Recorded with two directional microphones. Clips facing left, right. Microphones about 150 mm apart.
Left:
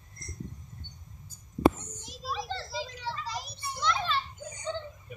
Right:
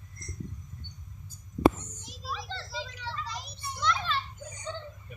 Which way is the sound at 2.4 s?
5° left (ahead or behind).